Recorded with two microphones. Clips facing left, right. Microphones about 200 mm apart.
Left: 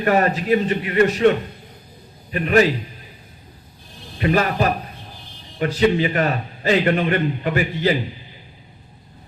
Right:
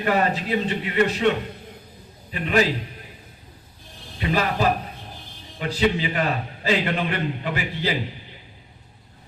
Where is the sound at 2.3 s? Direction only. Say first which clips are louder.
Left 5 dB; 50° left (ahead or behind).